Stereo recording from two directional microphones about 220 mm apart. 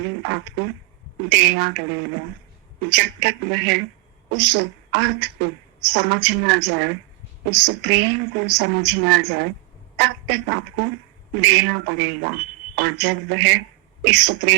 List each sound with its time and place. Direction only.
0.2 s a woman's voice: 55° right (ahead or behind)